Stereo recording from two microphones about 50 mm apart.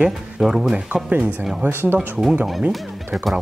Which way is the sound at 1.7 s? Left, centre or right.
Right.